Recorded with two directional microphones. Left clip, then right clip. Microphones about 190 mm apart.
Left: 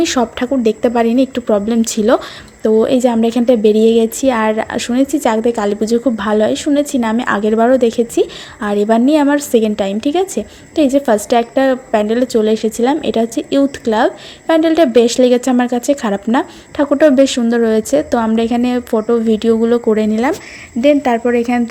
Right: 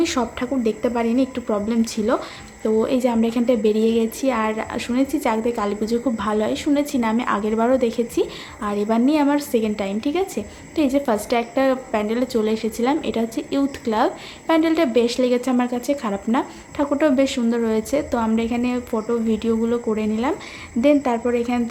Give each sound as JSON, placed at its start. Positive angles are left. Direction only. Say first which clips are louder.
{"t": 0.0, "sound": "a woman's voice", "louder": "left 7 dB", "side_deg": 30}